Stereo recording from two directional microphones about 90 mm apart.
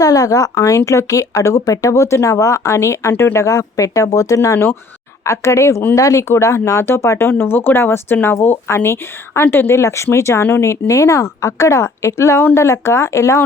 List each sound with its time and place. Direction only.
0.0 s speech: 40° left (ahead or behind)